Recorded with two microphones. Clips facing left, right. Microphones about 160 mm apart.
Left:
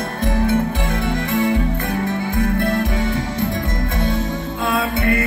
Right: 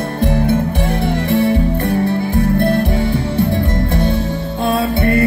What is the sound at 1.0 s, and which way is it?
Music, 30° right (ahead or behind).